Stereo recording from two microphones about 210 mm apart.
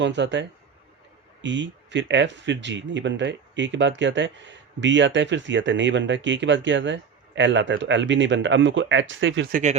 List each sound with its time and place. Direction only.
0.0 s speech: 60° right (ahead or behind)
9.5 s speech: 35° right (ahead or behind)